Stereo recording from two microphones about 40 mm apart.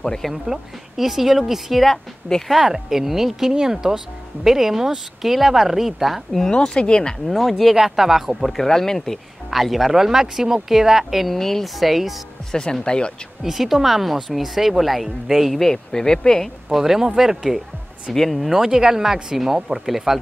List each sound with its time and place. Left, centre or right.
0.0 s speech: centre
0.3 s speech: centre
1.9 s speech: centre
2.4 s speech: centre
6.5 s speech: left
7.2 s speech: centre
9.5 s speech: centre
11.3 s speech: centre
12.8 s speech: left
13.4 s speech: centre
15.6 s speech: centre
16.7 s speech: centre
18.1 s speech: centre
18.4 s speech: centre